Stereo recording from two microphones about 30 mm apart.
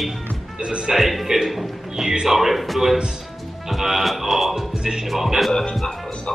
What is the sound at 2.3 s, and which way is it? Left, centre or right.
Speech, centre.